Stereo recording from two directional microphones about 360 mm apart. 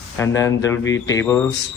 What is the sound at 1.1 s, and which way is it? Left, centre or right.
Speech, centre.